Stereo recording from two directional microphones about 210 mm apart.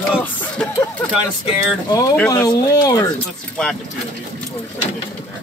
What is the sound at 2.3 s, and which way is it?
Speech, 20° left (ahead or behind).